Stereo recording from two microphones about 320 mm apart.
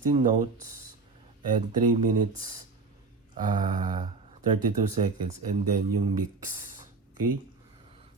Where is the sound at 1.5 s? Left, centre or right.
Right.